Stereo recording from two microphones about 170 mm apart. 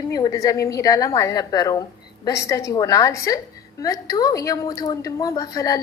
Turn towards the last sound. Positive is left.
turn(degrees=20)  # may be behind; listen again after turning